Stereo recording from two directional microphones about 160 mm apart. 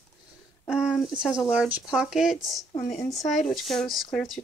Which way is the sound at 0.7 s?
5° right (ahead or behind).